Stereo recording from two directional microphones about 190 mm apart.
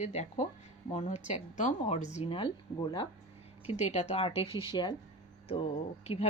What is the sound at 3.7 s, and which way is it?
A woman's voice, 35° left (ahead or behind).